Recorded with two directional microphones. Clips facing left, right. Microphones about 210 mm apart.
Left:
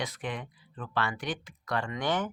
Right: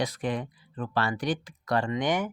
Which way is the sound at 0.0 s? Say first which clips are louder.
Right 6 dB; 35° right (ahead or behind).